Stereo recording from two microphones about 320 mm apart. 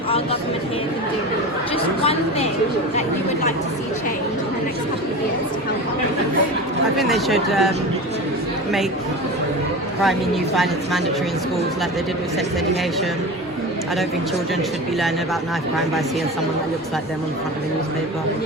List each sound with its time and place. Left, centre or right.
1.7 s a sound: centre
7.0 s a woman's voice: centre
10.0 s a woman's voice: centre